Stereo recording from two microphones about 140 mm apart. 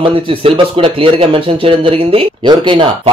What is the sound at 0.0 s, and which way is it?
Speech, 40° right (ahead or behind).